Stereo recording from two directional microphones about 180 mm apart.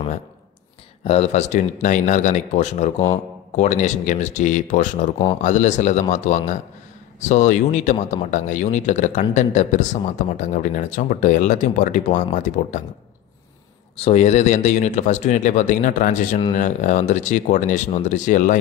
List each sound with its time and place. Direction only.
1.0 s a man's voice: 35° left (ahead or behind)
13.9 s a man's voice: 35° left (ahead or behind)